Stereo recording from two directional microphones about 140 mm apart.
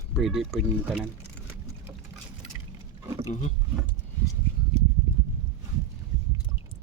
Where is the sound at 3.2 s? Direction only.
55° left (ahead or behind).